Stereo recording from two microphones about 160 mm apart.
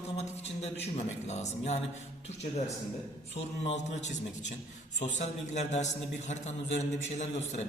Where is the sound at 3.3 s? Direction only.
45° left (ahead or behind).